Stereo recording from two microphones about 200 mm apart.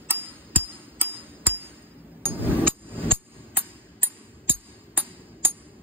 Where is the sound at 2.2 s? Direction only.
10° right (ahead or behind).